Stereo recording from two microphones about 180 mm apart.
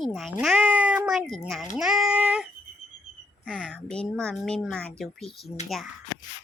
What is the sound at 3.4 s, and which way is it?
Speech, 5° left (ahead or behind).